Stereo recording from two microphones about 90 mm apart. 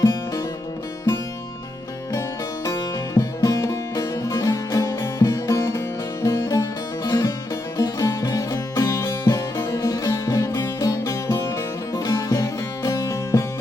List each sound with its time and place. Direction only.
0.0 s music: 35° left (ahead or behind)
3.2 s music: 40° left (ahead or behind)